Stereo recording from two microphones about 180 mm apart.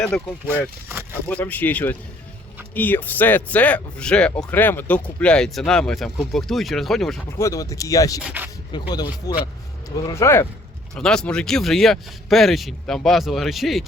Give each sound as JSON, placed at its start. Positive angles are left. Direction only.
{"t": 0.0, "sound": "speech", "side_deg": 10}
{"t": 7.3, "sound": "speech", "side_deg": 15}
{"t": 8.2, "sound": "speech", "side_deg": -10}
{"t": 8.9, "sound": "speech", "side_deg": 20}
{"t": 10.9, "sound": "speech", "side_deg": 5}